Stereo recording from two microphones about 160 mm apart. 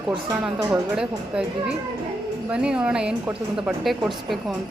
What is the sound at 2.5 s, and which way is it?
A woman's voice, 5° right (ahead or behind).